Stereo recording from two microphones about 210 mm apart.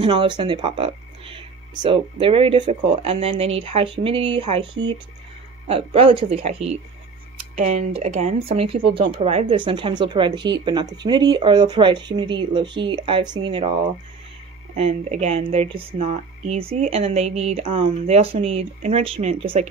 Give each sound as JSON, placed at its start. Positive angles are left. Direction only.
{"t": 0.0, "sound": "speech", "side_deg": -25}
{"t": 5.7, "sound": "speech", "side_deg": -25}
{"t": 14.8, "sound": "speech", "side_deg": -30}